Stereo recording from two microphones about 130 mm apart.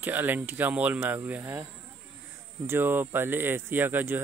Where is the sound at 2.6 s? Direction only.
15° right (ahead or behind).